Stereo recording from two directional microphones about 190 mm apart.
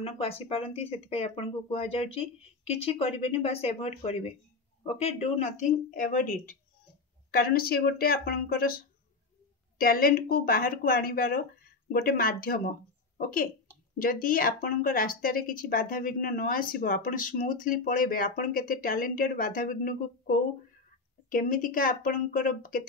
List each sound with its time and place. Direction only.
0.0 s a woman's voice: 30° left (ahead or behind); by 22.8 s 45° left (ahead or behind)